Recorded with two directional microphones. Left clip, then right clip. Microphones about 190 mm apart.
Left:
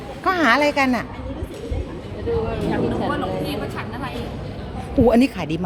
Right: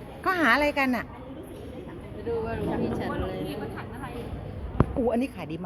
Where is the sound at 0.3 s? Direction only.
5° right (ahead or behind).